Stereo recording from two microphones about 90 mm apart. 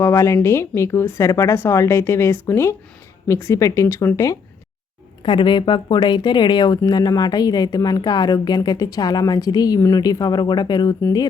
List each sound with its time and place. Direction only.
0.0 s speech: 30° left (ahead or behind)
5.2 s speech: 65° left (ahead or behind); by 11.3 s 45° left (ahead or behind)